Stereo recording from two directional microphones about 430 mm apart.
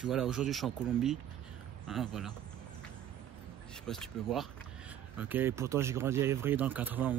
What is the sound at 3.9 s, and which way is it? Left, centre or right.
Speech, centre.